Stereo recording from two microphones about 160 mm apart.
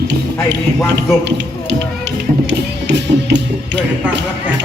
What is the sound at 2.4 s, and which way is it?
Music, 90° right.